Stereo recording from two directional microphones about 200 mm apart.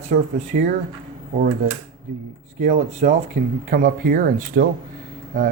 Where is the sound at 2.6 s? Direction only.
40° right (ahead or behind).